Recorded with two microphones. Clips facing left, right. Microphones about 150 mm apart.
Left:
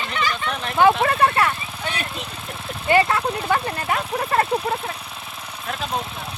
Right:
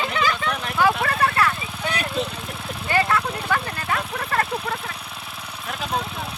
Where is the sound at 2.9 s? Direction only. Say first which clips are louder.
Left 4 dB; 25° left (ahead or behind).